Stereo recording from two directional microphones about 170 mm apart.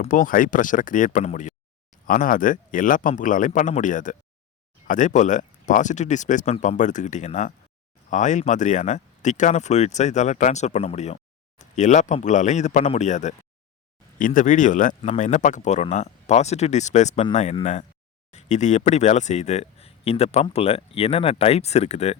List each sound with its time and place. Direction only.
0.0 s speech: 50° left (ahead or behind)